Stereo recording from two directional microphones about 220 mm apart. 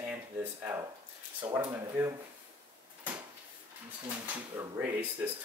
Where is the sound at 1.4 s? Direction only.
15° right (ahead or behind).